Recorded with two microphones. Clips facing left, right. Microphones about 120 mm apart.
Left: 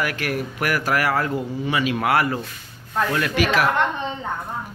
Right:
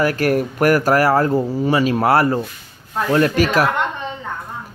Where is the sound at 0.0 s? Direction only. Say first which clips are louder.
Right 8 dB; 40° right (ahead or behind).